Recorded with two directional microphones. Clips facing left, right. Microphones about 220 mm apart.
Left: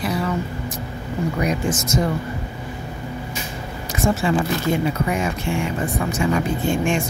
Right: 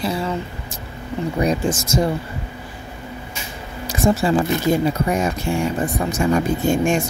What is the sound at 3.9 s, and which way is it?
Speech, 35° right (ahead or behind).